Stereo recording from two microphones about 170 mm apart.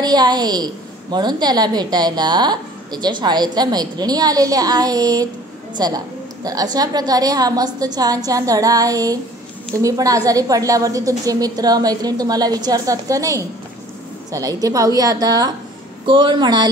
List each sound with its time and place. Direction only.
0.0 s a woman's voice: 25° right (ahead or behind)